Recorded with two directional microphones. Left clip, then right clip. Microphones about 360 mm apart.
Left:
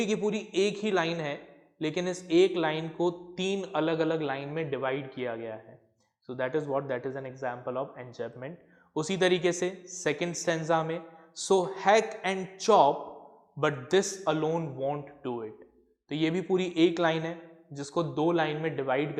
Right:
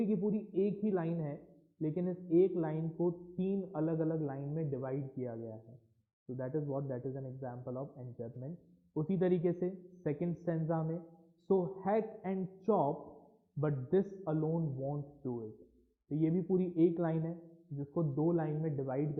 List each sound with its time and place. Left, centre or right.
0.0 s speech: centre
12.9 s speech: centre
13.6 s speech: centre